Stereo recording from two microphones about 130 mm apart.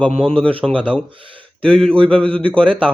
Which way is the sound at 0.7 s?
10° left (ahead or behind).